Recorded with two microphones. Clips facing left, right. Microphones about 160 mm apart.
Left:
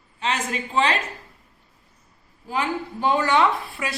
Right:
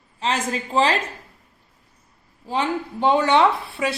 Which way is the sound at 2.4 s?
25° right (ahead or behind).